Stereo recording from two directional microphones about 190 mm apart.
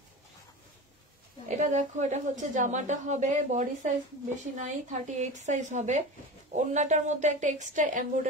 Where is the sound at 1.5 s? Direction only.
40° right (ahead or behind).